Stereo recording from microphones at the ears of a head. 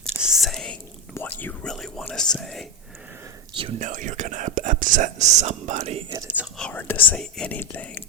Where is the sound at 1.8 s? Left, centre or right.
Centre.